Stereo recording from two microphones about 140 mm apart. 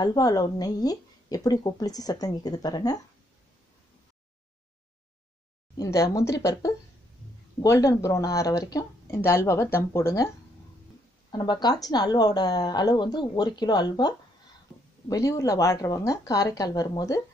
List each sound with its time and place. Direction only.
0.0 s speech: 30° left (ahead or behind)
5.8 s speech: 25° left (ahead or behind)
11.3 s speech: 30° left (ahead or behind)